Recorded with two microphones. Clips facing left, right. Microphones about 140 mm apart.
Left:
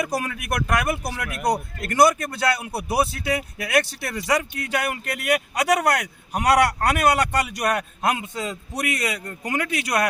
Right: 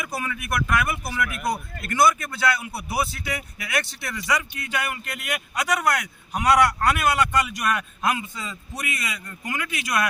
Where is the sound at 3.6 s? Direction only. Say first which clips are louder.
Left 6 dB; 35° left (ahead or behind).